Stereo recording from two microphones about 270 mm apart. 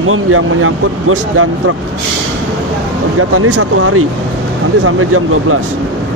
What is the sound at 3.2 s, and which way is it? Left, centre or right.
Speech, right.